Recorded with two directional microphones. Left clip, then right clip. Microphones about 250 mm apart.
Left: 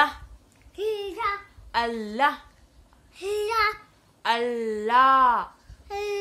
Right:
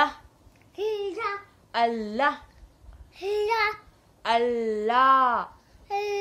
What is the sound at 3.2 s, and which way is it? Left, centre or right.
Child singing, centre.